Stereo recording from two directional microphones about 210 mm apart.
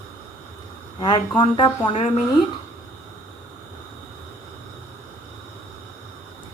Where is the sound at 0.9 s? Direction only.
20° left (ahead or behind).